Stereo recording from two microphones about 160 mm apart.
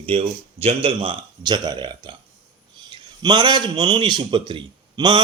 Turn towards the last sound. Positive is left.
turn(degrees=-30)  # may be behind; listen again after turning